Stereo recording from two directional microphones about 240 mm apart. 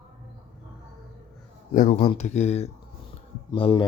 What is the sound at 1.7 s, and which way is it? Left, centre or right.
Speech, left.